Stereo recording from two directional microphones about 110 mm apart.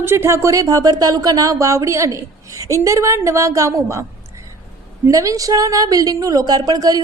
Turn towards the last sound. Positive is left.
turn(degrees=-35)  # may be behind; listen again after turning